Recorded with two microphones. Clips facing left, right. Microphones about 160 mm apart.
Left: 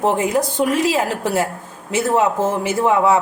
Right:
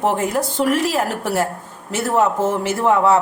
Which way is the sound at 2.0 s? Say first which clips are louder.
Even; 15° left (ahead or behind).